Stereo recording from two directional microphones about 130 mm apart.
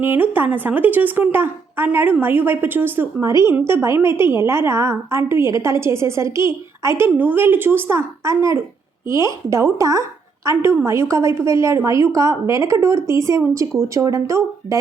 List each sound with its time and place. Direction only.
0.0 s a woman's voice: 15° right (ahead or behind)